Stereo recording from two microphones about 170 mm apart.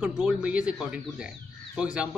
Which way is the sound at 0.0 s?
5° right (ahead or behind).